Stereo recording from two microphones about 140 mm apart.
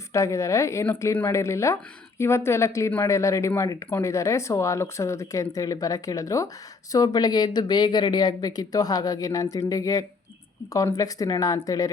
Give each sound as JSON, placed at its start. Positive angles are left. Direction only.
{"t": 0.1, "sound": "speech", "side_deg": 20}